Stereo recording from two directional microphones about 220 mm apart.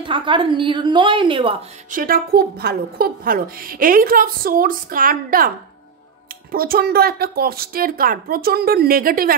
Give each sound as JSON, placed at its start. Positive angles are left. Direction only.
{"t": 0.0, "sound": "a woman's voice", "side_deg": -20}
{"t": 1.9, "sound": "a woman's voice", "side_deg": -40}
{"t": 6.5, "sound": "a woman's voice", "side_deg": -40}